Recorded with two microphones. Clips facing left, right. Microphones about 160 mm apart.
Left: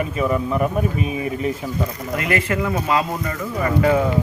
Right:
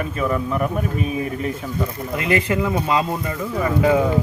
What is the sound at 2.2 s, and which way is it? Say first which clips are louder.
Speech: right 2 dB; 20° right (ahead or behind).